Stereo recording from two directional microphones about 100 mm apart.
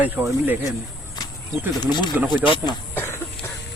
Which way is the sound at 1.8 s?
45° left (ahead or behind).